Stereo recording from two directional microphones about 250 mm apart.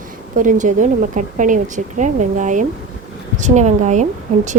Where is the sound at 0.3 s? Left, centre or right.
Right.